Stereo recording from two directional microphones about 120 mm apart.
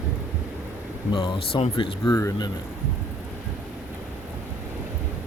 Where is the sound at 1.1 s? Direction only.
50° left (ahead or behind).